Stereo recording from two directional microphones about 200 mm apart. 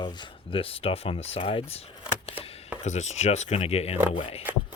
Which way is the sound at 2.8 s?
35° left (ahead or behind).